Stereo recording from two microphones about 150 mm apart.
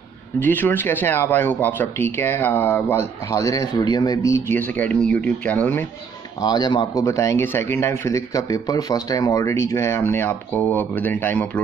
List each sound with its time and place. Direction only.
0.4 s speech: 15° left (ahead or behind)
6.4 s speech: 25° left (ahead or behind); by 11.6 s 10° left (ahead or behind)